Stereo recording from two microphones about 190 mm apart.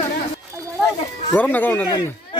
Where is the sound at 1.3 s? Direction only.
10° left (ahead or behind).